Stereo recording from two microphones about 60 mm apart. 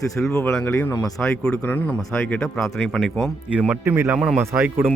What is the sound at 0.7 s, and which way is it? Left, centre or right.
Speech, left.